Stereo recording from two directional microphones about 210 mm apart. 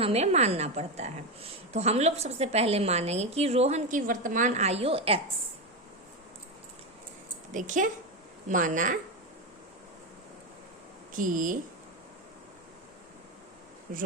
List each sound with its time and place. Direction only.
0.0 s a woman's voice: 30° right (ahead or behind)
7.5 s a woman's voice: 35° right (ahead or behind)
11.1 s speech: 40° right (ahead or behind)
13.9 s a woman's voice: 40° right (ahead or behind)